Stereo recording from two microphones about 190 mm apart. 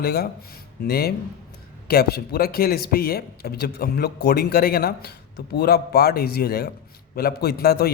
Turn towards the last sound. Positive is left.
turn(degrees=55)  # may be behind; listen again after turning